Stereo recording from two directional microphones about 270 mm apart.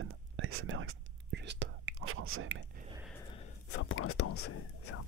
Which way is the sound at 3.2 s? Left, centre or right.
Centre.